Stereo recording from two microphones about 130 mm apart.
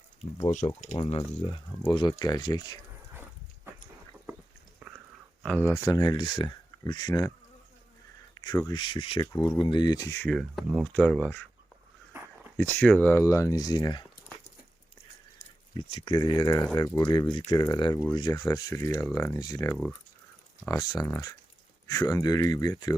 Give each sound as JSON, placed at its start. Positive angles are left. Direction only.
{"t": 0.4, "sound": "speech", "side_deg": 65}
{"t": 0.9, "sound": "speech", "side_deg": 40}
{"t": 4.8, "sound": "a sound", "side_deg": -10}
{"t": 5.5, "sound": "speech", "side_deg": 15}
{"t": 7.1, "sound": "speech", "side_deg": 25}
{"t": 8.5, "sound": "speech", "side_deg": 30}
{"t": 9.2, "sound": "speech", "side_deg": 30}
{"t": 10.2, "sound": "speech", "side_deg": 0}
{"t": 12.1, "sound": "dog", "side_deg": -20}
{"t": 12.5, "sound": "speech", "side_deg": 15}
{"t": 13.2, "sound": "speech", "side_deg": 25}
{"t": 15.7, "sound": "speech", "side_deg": 40}